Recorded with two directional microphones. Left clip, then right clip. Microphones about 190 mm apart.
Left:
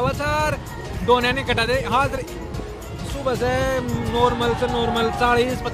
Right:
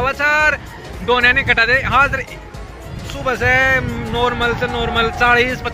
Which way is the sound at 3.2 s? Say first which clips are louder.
Right 7 dB; centre (ahead or behind).